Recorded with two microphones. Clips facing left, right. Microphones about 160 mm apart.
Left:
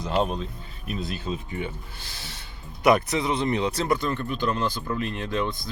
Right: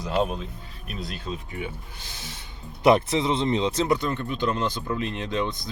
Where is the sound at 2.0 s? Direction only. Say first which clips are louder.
Right 1 dB; 20° right (ahead or behind).